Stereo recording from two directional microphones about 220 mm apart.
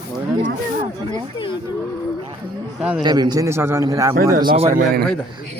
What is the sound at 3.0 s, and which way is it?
A man's voice, 20° right (ahead or behind).